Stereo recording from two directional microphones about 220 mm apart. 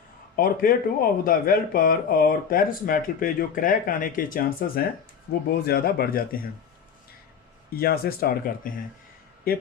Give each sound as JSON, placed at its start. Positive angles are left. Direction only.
{"t": 0.3, "sound": "speech", "side_deg": 40}
{"t": 7.7, "sound": "speech", "side_deg": 45}